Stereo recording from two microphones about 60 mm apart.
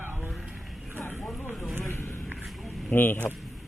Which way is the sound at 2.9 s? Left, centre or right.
Left.